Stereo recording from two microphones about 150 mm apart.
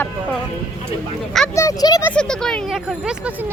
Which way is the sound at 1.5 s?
20° left (ahead or behind).